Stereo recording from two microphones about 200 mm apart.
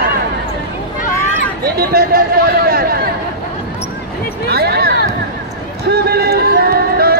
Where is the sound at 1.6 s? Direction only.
50° right (ahead or behind).